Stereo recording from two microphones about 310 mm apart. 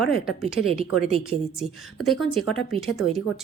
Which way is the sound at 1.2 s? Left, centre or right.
Centre.